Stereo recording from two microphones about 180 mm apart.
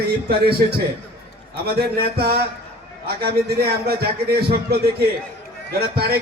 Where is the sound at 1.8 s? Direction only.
60° right (ahead or behind).